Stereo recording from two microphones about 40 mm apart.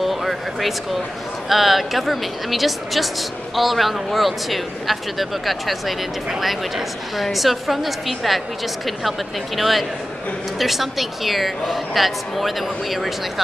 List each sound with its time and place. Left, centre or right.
0.0 s a sound: centre
1.5 s speech: centre
7.2 s speech: centre
9.6 s speech: centre